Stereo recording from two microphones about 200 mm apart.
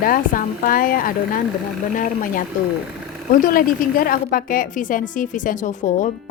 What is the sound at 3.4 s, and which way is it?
A woman's voice, 45° left (ahead or behind).